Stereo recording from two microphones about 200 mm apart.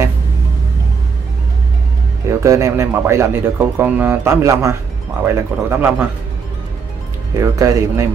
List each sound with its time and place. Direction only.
2.4 s speech: 15° right (ahead or behind)
7.3 s speech: 15° right (ahead or behind)